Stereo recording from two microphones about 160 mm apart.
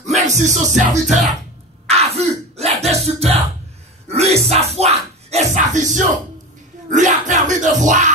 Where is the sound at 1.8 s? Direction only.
40° right (ahead or behind).